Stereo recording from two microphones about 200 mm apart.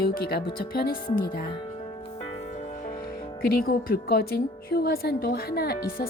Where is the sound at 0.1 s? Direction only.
50° left (ahead or behind).